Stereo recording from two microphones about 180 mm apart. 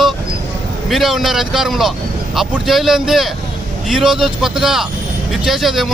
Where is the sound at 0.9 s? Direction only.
Centre (ahead or behind).